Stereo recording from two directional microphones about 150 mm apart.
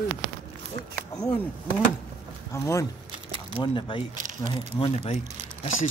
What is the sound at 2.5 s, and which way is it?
Speech, 20° left (ahead or behind).